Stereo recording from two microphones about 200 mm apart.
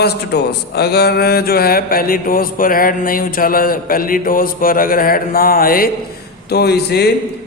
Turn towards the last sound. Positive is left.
turn(degrees=55)  # may be behind; listen again after turning